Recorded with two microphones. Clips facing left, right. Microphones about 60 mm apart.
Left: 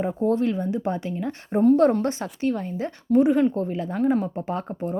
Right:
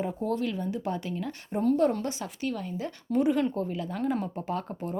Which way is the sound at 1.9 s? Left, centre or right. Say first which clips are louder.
Left 7 dB; left.